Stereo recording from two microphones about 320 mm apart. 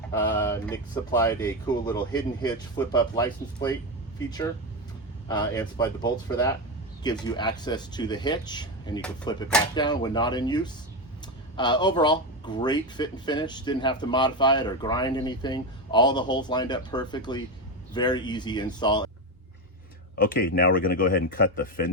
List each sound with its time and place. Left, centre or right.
0.1 s speech: centre
20.1 s speech: left